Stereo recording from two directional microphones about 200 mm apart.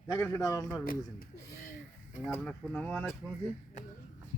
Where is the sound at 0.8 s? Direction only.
45° left (ahead or behind).